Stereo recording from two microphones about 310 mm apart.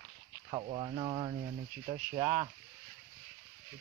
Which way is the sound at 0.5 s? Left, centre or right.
Centre.